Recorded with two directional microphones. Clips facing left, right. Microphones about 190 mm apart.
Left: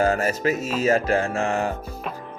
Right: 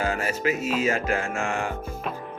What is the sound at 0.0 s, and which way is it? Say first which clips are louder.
Music: left 5 dB; 40° left (ahead or behind).